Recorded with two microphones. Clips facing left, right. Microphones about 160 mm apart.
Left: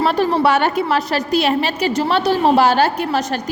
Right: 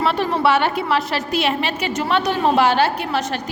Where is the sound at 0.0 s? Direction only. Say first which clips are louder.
Left 3 dB; 40° left (ahead or behind).